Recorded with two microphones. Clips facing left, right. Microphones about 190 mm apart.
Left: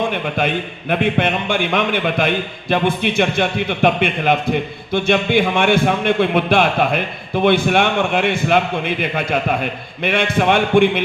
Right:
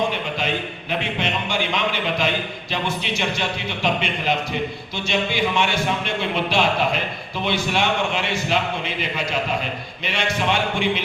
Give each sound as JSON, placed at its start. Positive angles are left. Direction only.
{"t": 0.1, "sound": "a man's voice", "side_deg": 55}